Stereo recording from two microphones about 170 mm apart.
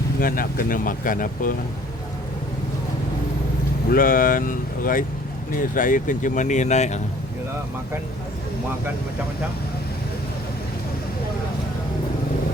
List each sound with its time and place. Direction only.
0.2 s speech: 55° left (ahead or behind)
3.9 s speech: 55° left (ahead or behind)